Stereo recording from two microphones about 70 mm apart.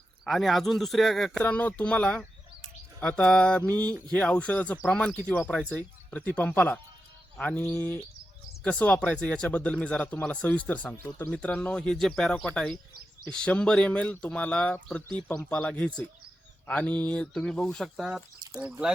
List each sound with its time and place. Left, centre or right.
0.3 s speech: centre
1.4 s speech: centre
8.6 s speech: centre
17.8 s speech: centre
18.1 s speech: right